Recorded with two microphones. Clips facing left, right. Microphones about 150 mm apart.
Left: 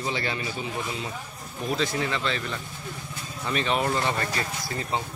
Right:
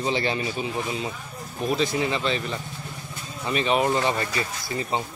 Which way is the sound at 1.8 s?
20° right (ahead or behind).